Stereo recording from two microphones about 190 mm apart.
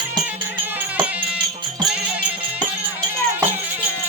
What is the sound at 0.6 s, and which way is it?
Music, 10° right (ahead or behind).